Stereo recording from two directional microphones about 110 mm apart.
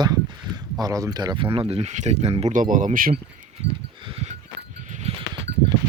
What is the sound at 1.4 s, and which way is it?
Speech, 55° right (ahead or behind).